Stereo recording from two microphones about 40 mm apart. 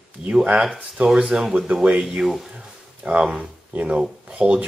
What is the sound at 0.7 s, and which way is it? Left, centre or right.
Speech, right.